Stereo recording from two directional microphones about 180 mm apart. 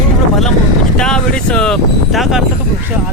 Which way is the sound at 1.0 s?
5° left (ahead or behind).